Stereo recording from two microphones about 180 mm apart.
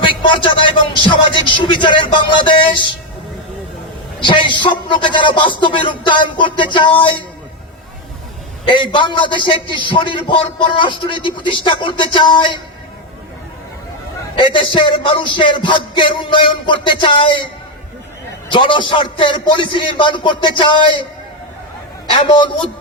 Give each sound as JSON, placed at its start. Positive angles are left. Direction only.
{"t": 0.0, "sound": "speech", "side_deg": 25}
{"t": 4.2, "sound": "speech", "side_deg": 25}
{"t": 8.6, "sound": "speech", "side_deg": 25}
{"t": 14.3, "sound": "speech", "side_deg": 25}
{"t": 22.1, "sound": "speech", "side_deg": 30}